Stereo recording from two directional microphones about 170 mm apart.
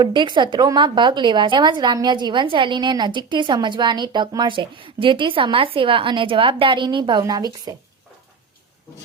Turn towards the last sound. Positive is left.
turn(degrees=-20)  # may be behind; listen again after turning